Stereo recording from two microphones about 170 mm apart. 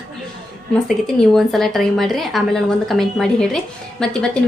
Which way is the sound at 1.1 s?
Centre (ahead or behind).